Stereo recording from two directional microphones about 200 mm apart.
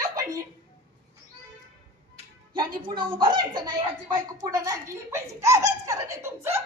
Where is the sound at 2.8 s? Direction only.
25° right (ahead or behind).